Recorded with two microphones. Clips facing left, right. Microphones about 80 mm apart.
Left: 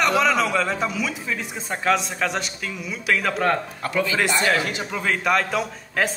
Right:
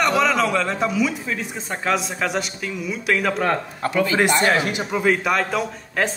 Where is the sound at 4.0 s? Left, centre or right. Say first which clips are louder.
Right 3 dB; right.